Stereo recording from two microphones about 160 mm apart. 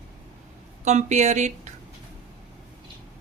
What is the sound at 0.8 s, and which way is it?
Speech, 45° right (ahead or behind).